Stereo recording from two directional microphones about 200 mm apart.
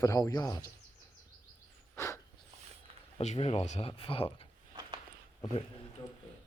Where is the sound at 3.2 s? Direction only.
35° left (ahead or behind).